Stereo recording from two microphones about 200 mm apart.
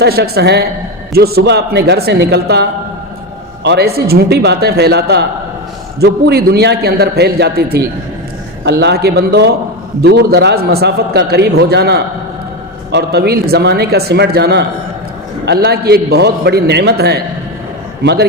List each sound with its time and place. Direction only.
0.0 s a man's voice: 55° right (ahead or behind)